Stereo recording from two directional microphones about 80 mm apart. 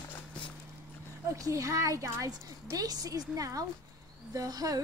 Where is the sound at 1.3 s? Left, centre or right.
Right.